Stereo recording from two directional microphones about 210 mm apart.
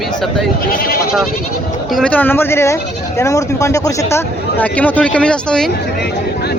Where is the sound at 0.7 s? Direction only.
45° left (ahead or behind).